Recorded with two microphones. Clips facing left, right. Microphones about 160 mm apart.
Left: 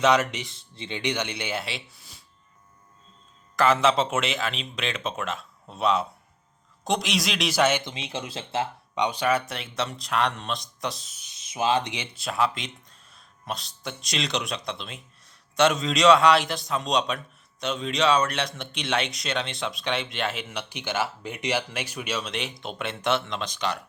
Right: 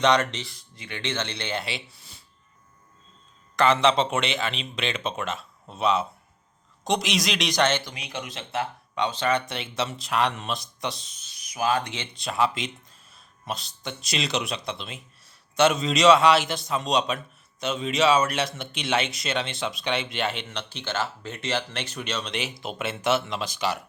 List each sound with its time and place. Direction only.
0.0 s speech: 5° left (ahead or behind)
0.5 s speech: 25° left (ahead or behind); by 2.2 s centre (ahead or behind)
3.5 s speech: centre (ahead or behind)
7.9 s speech: 25° left (ahead or behind)
9.0 s speech: 15° left (ahead or behind)
11.2 s speech: 20° left (ahead or behind)
12.1 s speech: centre (ahead or behind)